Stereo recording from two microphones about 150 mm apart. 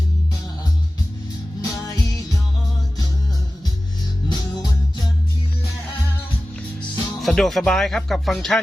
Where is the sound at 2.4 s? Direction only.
Centre (ahead or behind).